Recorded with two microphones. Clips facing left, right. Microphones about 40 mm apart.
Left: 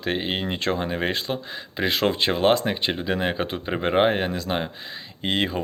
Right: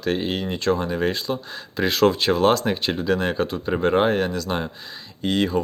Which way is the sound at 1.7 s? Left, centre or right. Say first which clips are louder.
Right 4 dB; centre.